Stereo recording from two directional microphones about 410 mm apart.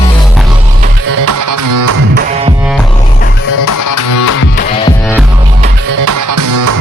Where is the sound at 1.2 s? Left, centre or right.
Right.